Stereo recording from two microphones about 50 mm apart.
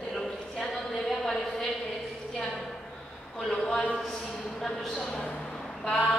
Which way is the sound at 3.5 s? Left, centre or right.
Centre.